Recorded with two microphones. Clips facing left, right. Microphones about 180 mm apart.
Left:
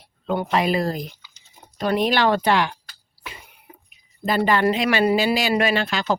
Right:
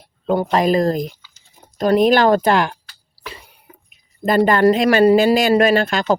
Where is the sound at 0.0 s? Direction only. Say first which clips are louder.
Right 6 dB; 40° right (ahead or behind).